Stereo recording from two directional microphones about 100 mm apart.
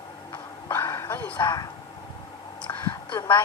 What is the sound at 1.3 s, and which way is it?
Speech, 45° left (ahead or behind).